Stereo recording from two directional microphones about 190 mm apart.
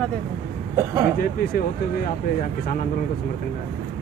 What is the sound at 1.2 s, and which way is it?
Speech, 50° left (ahead or behind).